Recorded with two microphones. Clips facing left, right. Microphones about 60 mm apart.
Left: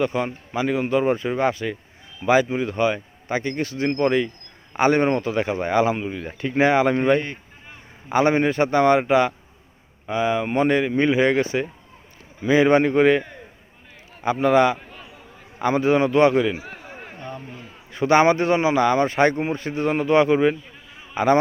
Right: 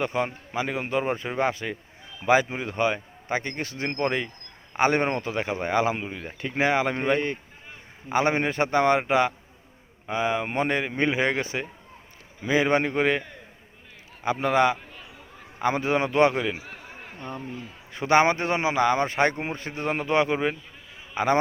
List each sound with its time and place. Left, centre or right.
0.0 s a man's voice: centre
5.7 s a man's voice: centre
14.3 s speech: centre
17.9 s speech: centre